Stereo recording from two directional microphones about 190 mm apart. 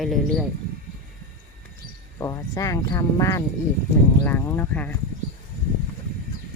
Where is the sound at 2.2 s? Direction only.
15° left (ahead or behind).